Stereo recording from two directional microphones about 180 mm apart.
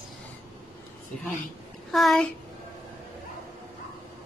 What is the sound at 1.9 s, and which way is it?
Speech, centre (ahead or behind).